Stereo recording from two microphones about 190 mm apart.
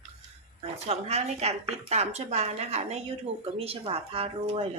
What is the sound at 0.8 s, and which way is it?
Speech, 35° right (ahead or behind).